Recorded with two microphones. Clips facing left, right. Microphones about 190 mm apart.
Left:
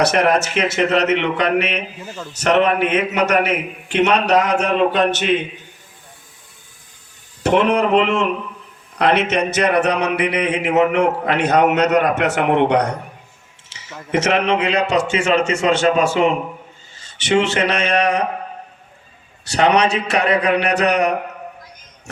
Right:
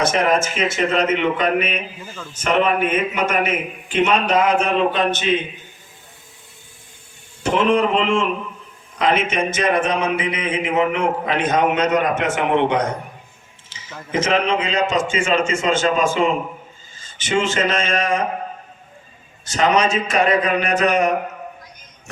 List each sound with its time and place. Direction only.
0.0 s a man's voice: 65° left (ahead or behind)
7.4 s a man's voice: 65° left (ahead or behind)
19.5 s a man's voice: 65° left (ahead or behind)